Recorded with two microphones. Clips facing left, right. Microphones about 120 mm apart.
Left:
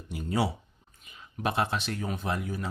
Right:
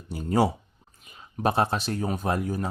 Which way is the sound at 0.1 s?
40° right (ahead or behind).